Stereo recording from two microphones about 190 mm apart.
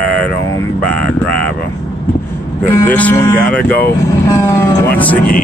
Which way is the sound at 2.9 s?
10° left (ahead or behind).